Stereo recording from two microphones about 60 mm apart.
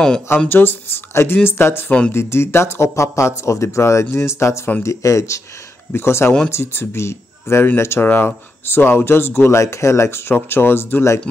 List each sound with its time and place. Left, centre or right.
0.5 s speech: left
1.9 s speech: centre
2.1 s speech: left
5.9 s speech: left
9.6 s speech: left